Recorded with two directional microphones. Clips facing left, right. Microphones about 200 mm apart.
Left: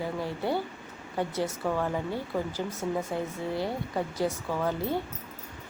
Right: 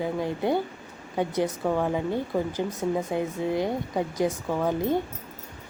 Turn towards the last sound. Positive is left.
turn(degrees=-15)  # may be behind; listen again after turning